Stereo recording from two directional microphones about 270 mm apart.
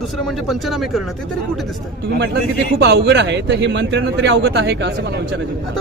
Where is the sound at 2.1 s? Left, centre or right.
Right.